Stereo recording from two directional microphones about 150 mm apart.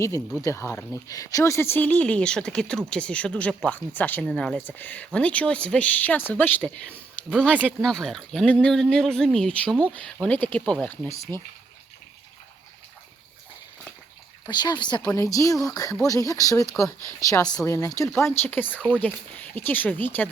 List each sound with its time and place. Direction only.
0.4 s speech: 20° left (ahead or behind)
11.1 s speech: 20° left (ahead or behind)
14.4 s speech: 30° left (ahead or behind); by 20.3 s 10° left (ahead or behind)